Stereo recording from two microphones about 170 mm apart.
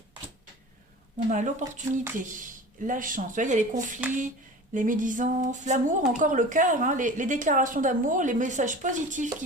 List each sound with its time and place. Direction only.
1.3 s speech: 45° right (ahead or behind)
2.8 s speech: 50° right (ahead or behind)